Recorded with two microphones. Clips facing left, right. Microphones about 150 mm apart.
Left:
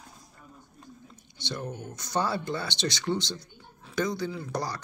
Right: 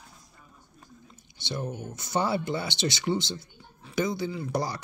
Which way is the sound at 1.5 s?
10° right (ahead or behind).